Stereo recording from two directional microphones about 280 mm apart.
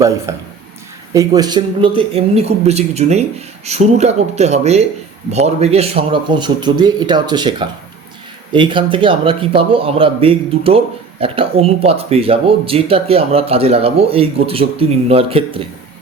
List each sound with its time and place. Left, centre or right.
0.3 s a man's voice: centre